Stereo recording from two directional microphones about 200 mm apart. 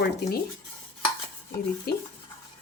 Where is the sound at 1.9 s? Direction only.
50° left (ahead or behind).